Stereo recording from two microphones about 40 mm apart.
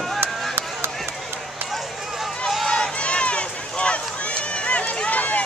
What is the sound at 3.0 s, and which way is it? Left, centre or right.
Run, left.